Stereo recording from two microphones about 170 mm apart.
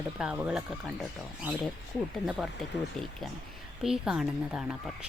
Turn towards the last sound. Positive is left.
turn(degrees=-5)  # may be behind; listen again after turning